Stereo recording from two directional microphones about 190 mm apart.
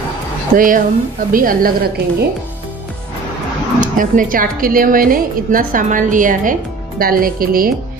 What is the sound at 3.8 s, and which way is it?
A woman's voice, 45° right (ahead or behind).